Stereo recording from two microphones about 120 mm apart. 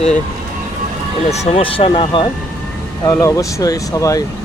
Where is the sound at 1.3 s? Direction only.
65° left (ahead or behind); by 2.2 s 45° left (ahead or behind).